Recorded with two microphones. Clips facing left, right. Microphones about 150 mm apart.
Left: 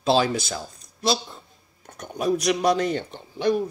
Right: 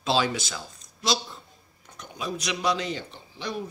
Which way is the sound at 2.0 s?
45° left (ahead or behind).